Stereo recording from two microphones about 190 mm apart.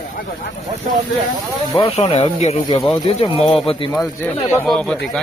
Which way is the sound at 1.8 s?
30° left (ahead or behind).